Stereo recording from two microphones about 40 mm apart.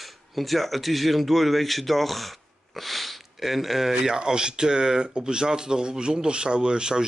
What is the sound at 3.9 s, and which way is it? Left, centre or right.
Speech, right.